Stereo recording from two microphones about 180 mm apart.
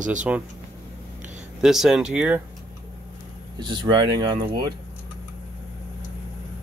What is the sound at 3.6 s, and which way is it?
Speech, 25° right (ahead or behind).